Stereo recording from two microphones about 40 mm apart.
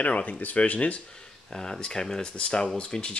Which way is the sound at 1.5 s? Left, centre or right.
Centre.